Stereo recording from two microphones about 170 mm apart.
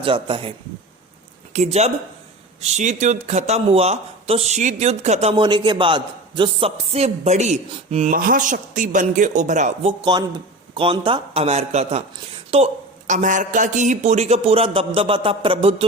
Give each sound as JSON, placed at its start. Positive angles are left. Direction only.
{"t": 0.0, "sound": "a man's voice", "side_deg": -30}
{"t": 1.5, "sound": "a man's voice", "side_deg": -40}
{"t": 8.1, "sound": "a man's voice", "side_deg": -55}
{"t": 10.0, "sound": "a man's voice", "side_deg": -25}